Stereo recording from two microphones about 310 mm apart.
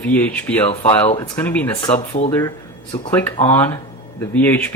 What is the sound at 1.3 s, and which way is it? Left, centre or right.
Speech, centre.